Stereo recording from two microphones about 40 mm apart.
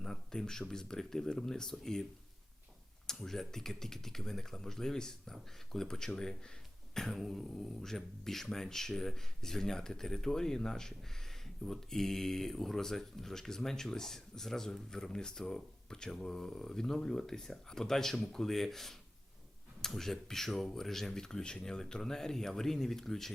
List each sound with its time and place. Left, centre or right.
0.0 s speech: centre
3.2 s speech: centre